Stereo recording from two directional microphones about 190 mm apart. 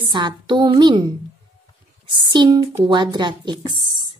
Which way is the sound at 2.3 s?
25° right (ahead or behind).